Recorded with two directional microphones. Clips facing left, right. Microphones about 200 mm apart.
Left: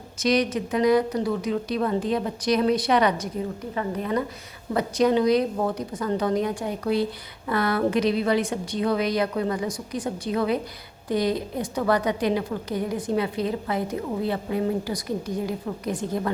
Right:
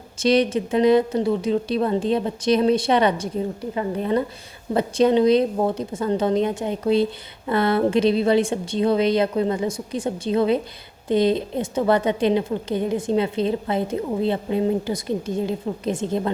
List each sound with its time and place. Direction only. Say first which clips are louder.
0.2 s a woman's voice: right 4 dB; 30° right (ahead or behind)